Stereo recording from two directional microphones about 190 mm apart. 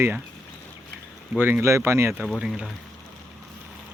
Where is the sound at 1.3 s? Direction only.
5° right (ahead or behind).